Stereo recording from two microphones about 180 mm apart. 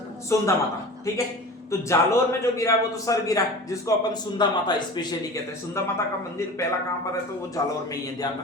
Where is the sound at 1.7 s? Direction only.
15° left (ahead or behind).